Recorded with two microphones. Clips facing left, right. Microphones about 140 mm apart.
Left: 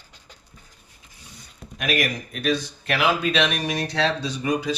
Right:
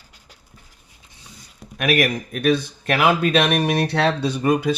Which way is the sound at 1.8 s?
60° right (ahead or behind).